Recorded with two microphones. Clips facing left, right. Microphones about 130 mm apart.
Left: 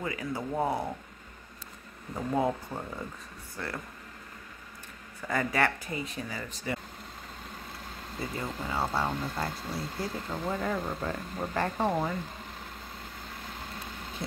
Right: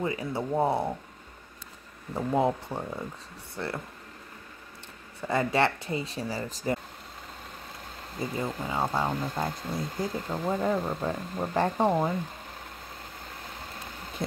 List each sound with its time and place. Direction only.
0.0 s speech: 25° right (ahead or behind)
2.1 s speech: 25° right (ahead or behind)
5.2 s speech: 25° right (ahead or behind)
8.2 s speech: 15° right (ahead or behind)